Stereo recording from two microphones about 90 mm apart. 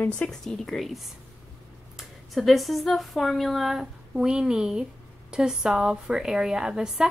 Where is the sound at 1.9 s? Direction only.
Centre (ahead or behind).